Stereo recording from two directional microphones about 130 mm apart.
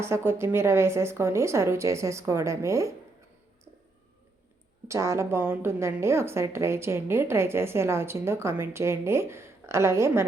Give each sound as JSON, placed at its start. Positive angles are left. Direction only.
{"t": 0.0, "sound": "a woman's voice", "side_deg": -20}
{"t": 4.9, "sound": "a woman's voice", "side_deg": -20}